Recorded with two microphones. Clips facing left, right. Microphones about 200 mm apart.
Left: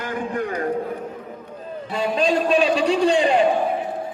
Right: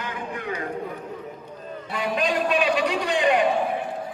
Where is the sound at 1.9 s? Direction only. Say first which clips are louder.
Left 4 dB; 30° left (ahead or behind).